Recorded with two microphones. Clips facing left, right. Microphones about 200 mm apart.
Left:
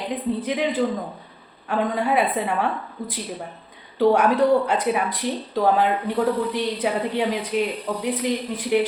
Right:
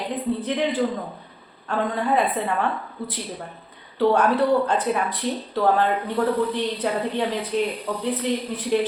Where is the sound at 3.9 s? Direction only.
10° left (ahead or behind).